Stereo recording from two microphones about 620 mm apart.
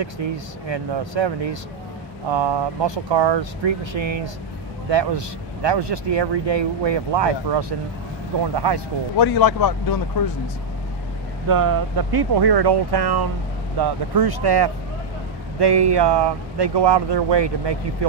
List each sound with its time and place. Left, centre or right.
0.0 s speech: right
9.2 s speech: left
11.4 s speech: right